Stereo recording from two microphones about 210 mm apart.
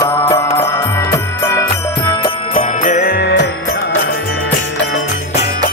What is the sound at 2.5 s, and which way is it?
Jingle bell, 40° left (ahead or behind).